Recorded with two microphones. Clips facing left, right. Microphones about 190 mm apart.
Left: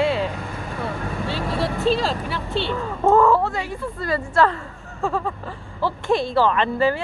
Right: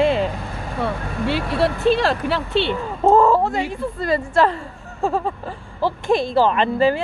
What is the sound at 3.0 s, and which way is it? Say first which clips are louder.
Speech: right 2 dB; 20° right (ahead or behind).